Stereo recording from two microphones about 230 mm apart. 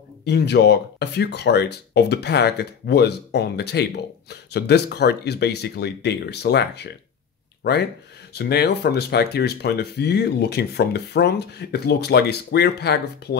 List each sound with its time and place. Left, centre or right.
0.2 s speech: left
8.4 s speech: left